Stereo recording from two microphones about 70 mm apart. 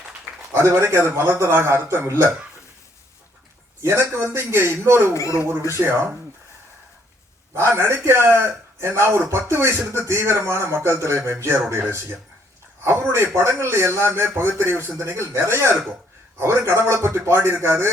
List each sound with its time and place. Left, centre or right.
0.5 s a man's voice: right
3.8 s a man's voice: right
5.1 s speech: left
5.4 s a man's voice: right
7.5 s a man's voice: right